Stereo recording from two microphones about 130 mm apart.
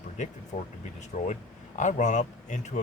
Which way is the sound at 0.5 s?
60° left (ahead or behind).